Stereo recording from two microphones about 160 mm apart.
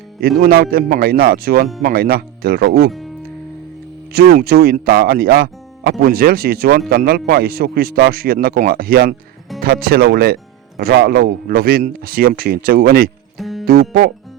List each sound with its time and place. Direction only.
0.2 s speech: 70° right (ahead or behind)
4.1 s speech: 75° right (ahead or behind)
13.4 s music: centre (ahead or behind)